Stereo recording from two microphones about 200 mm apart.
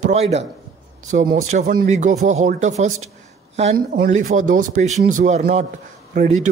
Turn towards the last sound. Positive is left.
turn(degrees=-40)  # may be behind; listen again after turning